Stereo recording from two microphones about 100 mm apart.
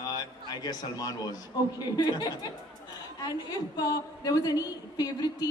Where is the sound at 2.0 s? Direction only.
40° left (ahead or behind).